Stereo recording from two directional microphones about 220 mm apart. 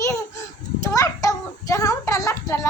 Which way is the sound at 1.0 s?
15° left (ahead or behind).